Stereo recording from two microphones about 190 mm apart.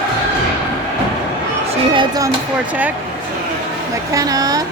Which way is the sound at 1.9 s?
20° right (ahead or behind).